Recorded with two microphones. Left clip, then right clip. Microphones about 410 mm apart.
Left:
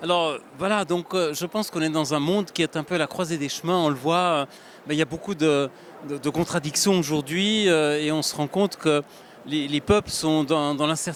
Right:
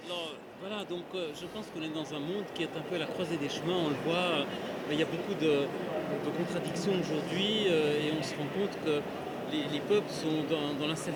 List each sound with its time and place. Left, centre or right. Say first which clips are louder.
0.1 s speech: left 16 dB; left